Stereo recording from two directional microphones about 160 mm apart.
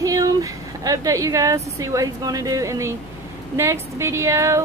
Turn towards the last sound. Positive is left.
turn(degrees=-20)  # may be behind; listen again after turning